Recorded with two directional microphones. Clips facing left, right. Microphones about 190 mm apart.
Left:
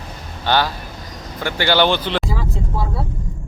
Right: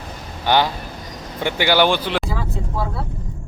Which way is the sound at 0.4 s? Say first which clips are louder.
Right 1 dB; 15° right (ahead or behind).